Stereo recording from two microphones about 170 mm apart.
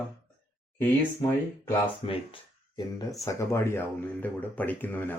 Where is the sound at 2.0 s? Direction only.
30° left (ahead or behind).